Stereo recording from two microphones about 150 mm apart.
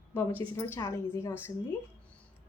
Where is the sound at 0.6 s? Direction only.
20° left (ahead or behind).